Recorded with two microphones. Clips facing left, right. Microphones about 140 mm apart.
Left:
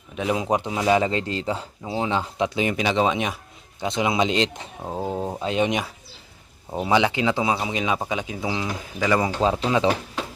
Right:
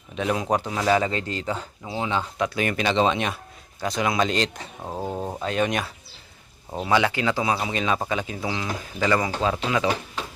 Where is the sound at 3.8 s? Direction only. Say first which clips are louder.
Left 1 dB; 25° left (ahead or behind).